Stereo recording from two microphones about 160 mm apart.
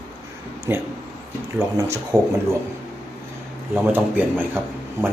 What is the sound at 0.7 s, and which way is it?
Speech, 10° right (ahead or behind).